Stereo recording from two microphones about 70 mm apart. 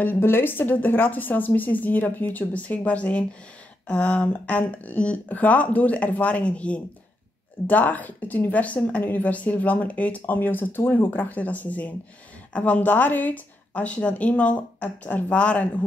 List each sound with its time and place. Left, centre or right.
0.0 s a woman's voice: left